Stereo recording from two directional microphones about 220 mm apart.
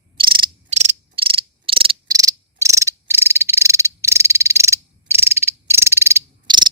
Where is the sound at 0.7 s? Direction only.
30° right (ahead or behind).